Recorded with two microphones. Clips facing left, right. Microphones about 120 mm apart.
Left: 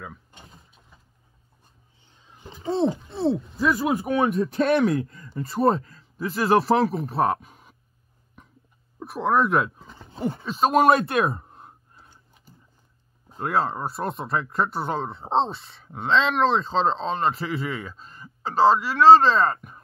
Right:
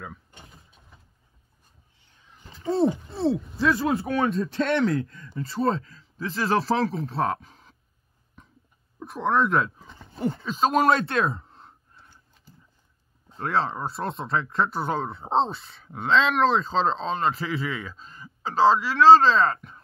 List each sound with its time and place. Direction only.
2.1 s a sound: 20° left (ahead or behind)
3.1 s speech: centre (ahead or behind)
3.5 s speech: 10° left (ahead or behind)
9.0 s speech: 5° left (ahead or behind)
11.1 s sigh: 10° left (ahead or behind)
13.3 s speech: 10° left (ahead or behind)